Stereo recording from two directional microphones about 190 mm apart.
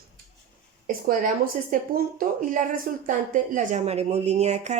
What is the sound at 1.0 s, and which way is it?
A woman's voice, 45° right (ahead or behind).